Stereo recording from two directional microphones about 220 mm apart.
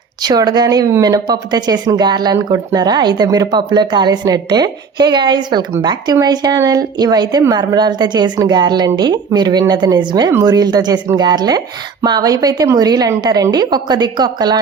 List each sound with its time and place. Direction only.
0.2 s speech: 20° right (ahead or behind)